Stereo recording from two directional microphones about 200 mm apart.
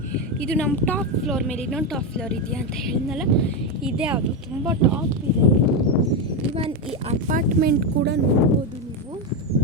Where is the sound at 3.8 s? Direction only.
5° right (ahead or behind).